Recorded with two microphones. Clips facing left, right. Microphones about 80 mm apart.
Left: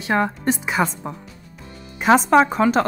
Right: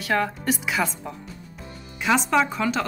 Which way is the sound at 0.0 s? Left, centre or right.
Left.